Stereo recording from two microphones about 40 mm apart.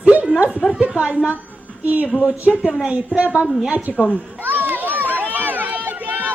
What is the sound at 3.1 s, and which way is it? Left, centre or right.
Speech, right.